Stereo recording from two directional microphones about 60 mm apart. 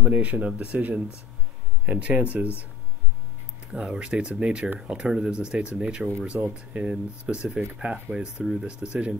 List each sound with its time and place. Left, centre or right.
0.1 s speech: right
3.7 s speech: centre